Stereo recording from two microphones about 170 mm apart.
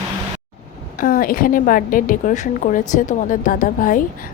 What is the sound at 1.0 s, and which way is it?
A woman's voice, 55° left (ahead or behind).